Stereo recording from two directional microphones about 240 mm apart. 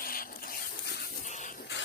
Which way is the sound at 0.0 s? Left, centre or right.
Left.